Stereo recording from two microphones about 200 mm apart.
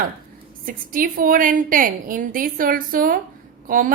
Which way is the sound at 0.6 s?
45° right (ahead or behind).